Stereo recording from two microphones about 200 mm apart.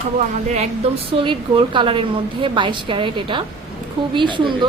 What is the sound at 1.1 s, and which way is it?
A woman's voice, 25° right (ahead or behind).